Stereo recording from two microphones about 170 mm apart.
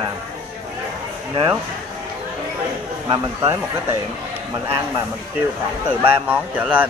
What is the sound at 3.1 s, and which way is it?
Speech, 20° right (ahead or behind).